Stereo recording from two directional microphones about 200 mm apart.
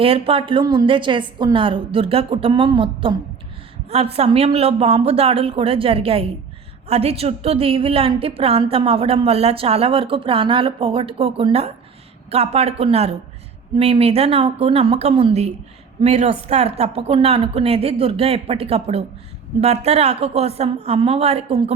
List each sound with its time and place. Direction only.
0.0 s a woman's voice: 30° right (ahead or behind)